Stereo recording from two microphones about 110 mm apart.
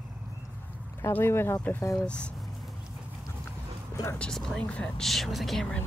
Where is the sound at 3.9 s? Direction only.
25° left (ahead or behind).